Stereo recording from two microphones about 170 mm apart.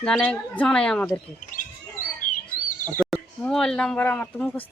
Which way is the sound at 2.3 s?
55° left (ahead or behind).